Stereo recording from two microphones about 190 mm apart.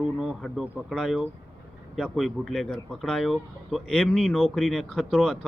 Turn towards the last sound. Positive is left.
turn(degrees=0)  # may be behind; listen again after turning